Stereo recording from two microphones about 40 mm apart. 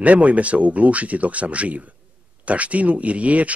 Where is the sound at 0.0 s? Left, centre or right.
Right.